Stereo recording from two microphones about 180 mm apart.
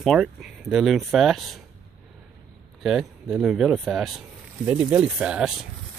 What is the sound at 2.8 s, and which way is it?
Speech, centre (ahead or behind).